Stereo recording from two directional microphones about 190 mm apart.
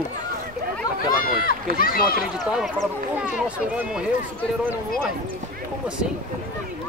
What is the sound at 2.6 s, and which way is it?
Speech, 5° right (ahead or behind).